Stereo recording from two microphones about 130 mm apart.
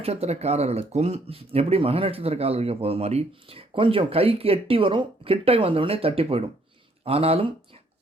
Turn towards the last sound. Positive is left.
turn(degrees=-50)  # may be behind; listen again after turning